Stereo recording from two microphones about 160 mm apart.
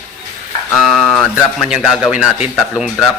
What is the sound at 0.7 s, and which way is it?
Speech, centre (ahead or behind).